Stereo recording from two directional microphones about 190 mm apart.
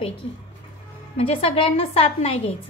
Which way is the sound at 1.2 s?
30° left (ahead or behind).